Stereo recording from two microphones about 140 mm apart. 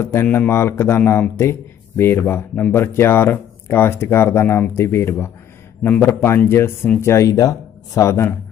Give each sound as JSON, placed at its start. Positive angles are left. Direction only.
{"t": 0.0, "sound": "a man's voice", "side_deg": 15}